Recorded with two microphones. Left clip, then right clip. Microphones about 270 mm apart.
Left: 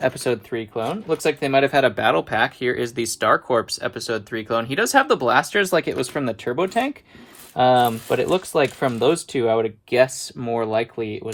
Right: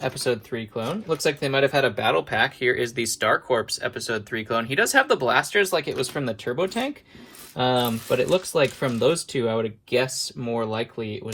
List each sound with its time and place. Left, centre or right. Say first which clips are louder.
0.0 s speech: left 4 dB; left